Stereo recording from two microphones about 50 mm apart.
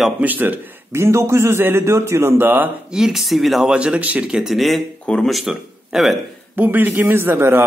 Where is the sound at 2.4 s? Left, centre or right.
Right.